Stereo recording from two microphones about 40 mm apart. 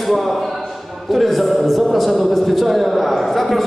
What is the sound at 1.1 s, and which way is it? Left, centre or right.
A man's voice, centre.